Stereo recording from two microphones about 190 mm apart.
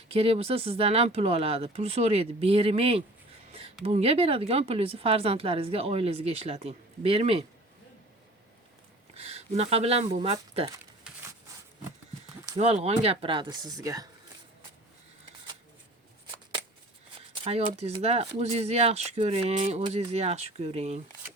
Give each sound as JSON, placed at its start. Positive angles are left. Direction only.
{"t": 0.1, "sound": "speech", "side_deg": -30}
{"t": 9.1, "sound": "speech", "side_deg": -35}
{"t": 11.1, "sound": "a sound", "side_deg": -5}
{"t": 12.5, "sound": "speech", "side_deg": -35}
{"t": 17.4, "sound": "speech", "side_deg": -30}